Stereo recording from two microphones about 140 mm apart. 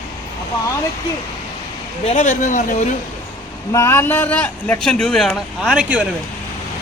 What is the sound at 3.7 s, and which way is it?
A man's voice, 20° left (ahead or behind).